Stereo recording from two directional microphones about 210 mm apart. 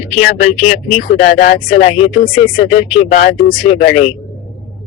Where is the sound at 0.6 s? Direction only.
30° left (ahead or behind).